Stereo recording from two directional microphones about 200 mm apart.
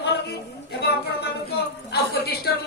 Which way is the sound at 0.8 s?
55° left (ahead or behind).